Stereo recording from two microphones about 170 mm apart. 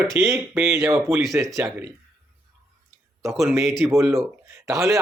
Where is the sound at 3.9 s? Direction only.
15° right (ahead or behind).